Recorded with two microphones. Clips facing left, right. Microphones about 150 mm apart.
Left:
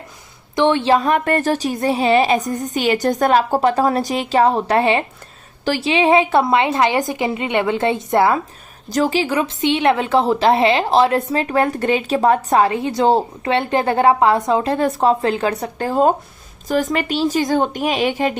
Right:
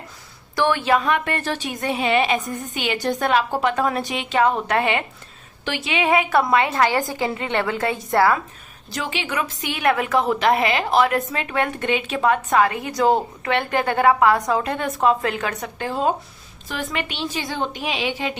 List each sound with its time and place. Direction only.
0.5 s a woman's voice: 25° left (ahead or behind)
8.9 s a woman's voice: 40° left (ahead or behind)